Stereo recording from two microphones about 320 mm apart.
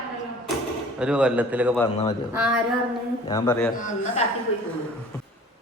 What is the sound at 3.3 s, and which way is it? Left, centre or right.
Speech, centre.